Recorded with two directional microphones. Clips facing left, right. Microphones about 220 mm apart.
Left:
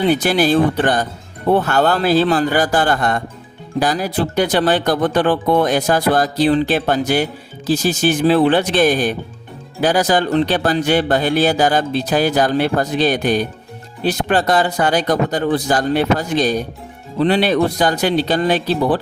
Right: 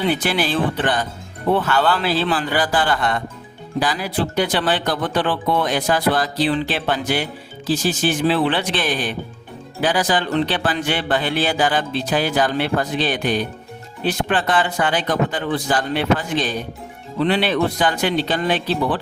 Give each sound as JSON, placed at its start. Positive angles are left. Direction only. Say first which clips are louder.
{"t": 0.1, "sound": "speech", "louder": "left 6 dB", "side_deg": 40}